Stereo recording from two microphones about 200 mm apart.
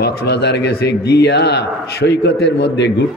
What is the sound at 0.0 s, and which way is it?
A man's voice, 55° left (ahead or behind).